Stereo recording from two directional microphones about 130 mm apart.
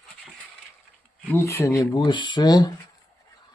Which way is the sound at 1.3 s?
20° left (ahead or behind).